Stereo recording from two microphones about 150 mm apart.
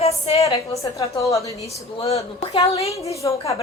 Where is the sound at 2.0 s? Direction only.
40° left (ahead or behind).